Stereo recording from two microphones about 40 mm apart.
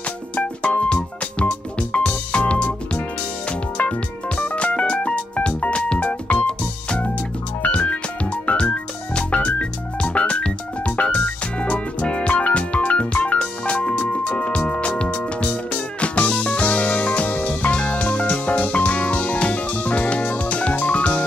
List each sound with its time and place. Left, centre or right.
0.4 s music: left
6.0 s music: left
6.4 s music: left